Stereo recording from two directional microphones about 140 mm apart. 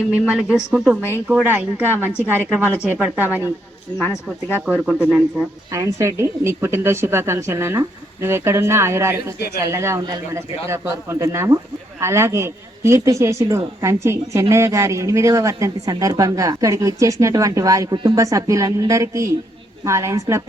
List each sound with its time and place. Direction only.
0.1 s a woman's voice: 10° right (ahead or behind)
4.5 s a woman's voice: 10° right (ahead or behind)
5.7 s a woman's voice: 20° right (ahead or behind)